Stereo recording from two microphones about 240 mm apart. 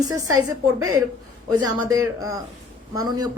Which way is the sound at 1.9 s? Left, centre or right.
Centre.